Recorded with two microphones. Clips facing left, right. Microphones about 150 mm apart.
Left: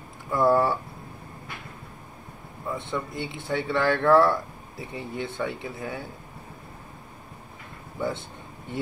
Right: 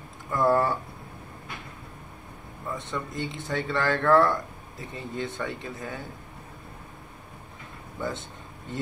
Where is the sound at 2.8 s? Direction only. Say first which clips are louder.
Left 1 dB; 65° left (ahead or behind).